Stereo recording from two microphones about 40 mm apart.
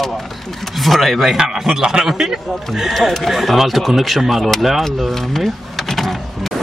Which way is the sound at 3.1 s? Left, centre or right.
Centre.